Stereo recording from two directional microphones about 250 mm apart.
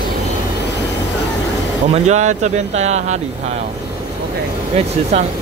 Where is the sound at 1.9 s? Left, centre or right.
Right.